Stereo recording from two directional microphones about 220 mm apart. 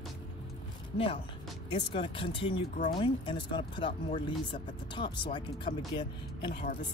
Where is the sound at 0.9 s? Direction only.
25° left (ahead or behind).